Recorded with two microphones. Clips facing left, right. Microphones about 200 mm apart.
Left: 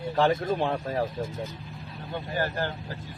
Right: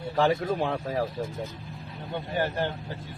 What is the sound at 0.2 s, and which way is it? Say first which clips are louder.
Speech: even; 5° right (ahead or behind).